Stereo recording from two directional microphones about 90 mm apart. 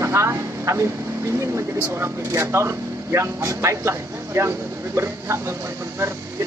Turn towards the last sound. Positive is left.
turn(degrees=-30)  # may be behind; listen again after turning